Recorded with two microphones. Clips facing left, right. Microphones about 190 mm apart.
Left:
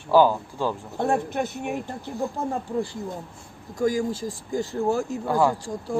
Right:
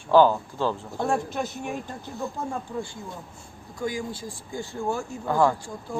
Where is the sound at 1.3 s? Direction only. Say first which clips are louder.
Left 3 dB; 60° left (ahead or behind).